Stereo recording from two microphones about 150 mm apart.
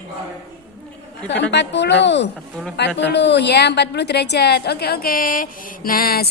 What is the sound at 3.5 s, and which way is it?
A woman's voice, 90° left.